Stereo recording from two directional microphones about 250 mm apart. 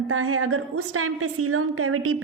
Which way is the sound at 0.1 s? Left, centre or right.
Right.